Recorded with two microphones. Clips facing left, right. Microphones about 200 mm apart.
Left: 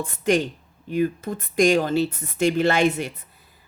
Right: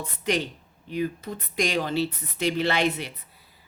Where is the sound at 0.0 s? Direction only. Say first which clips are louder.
Left 6 dB; 45° left (ahead or behind).